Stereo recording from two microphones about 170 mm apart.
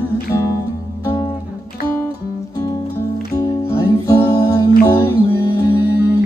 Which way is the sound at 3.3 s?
15° left (ahead or behind).